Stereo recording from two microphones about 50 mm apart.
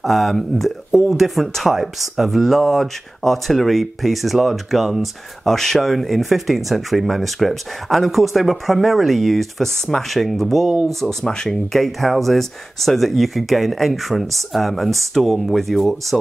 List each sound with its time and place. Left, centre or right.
0.0 s speech: centre